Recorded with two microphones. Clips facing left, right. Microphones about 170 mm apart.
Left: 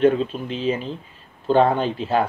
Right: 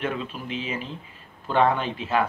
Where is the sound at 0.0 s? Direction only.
30° left (ahead or behind).